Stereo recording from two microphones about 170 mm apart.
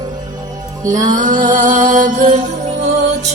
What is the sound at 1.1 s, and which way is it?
Music, 50° right (ahead or behind).